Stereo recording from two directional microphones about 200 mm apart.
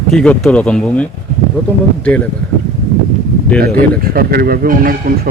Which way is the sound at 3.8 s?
50° right (ahead or behind).